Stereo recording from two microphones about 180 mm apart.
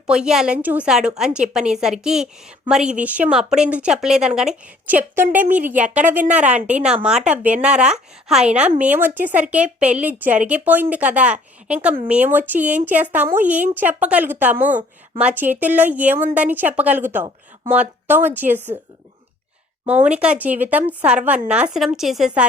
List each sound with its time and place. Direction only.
0.1 s a woman's voice: 5° right (ahead or behind)
19.9 s a woman's voice: 10° right (ahead or behind)